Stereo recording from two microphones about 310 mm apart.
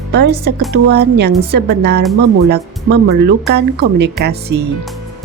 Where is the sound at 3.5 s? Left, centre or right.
Right.